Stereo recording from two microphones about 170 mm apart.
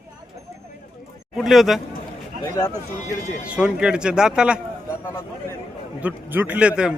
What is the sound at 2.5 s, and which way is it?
Speech, 20° left (ahead or behind).